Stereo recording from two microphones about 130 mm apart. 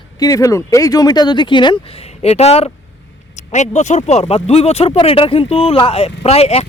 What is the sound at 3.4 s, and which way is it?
Speech, 65° left (ahead or behind).